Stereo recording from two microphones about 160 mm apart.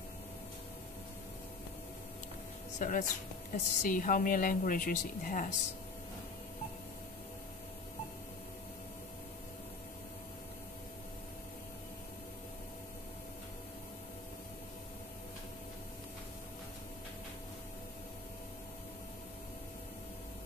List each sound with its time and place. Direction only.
2.8 s a woman's voice: 55° left (ahead or behind)